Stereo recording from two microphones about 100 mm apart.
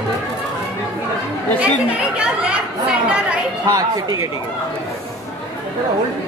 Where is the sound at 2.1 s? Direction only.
10° right (ahead or behind).